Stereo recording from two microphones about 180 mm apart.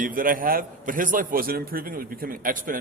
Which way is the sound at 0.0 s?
50° right (ahead or behind).